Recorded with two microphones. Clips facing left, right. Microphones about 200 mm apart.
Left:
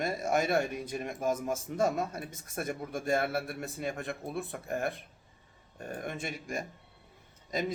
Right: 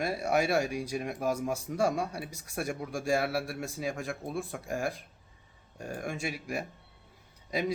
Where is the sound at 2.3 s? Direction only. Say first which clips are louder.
Right 1 dB; 75° right (ahead or behind).